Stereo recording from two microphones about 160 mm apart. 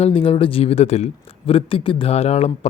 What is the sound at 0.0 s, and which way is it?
Speech, 35° left (ahead or behind).